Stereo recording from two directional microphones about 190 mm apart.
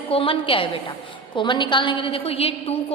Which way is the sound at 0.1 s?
30° left (ahead or behind).